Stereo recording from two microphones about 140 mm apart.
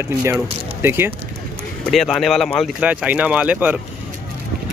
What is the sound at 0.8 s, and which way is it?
Speech, 15° right (ahead or behind).